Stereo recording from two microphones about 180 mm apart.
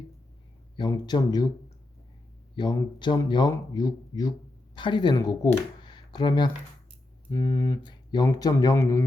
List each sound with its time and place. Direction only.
0.8 s speech: 25° left (ahead or behind)
2.6 s speech: 25° left (ahead or behind)